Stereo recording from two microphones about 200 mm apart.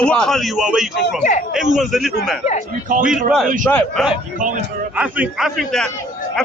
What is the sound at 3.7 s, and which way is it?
Speech, 10° left (ahead or behind).